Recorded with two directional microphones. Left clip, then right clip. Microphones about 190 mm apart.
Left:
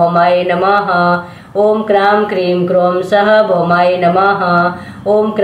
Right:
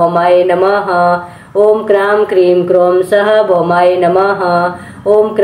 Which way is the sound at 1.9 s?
35° right (ahead or behind).